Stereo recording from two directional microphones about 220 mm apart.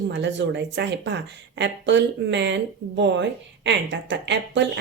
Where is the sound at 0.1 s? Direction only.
55° right (ahead or behind).